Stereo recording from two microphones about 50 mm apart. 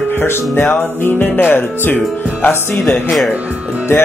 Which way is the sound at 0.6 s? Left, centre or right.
Left.